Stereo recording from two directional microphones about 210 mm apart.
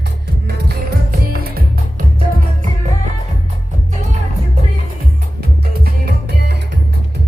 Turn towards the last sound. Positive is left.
turn(degrees=-50)  # may be behind; listen again after turning